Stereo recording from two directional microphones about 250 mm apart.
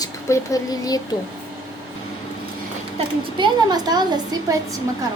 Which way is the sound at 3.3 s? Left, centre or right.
Centre.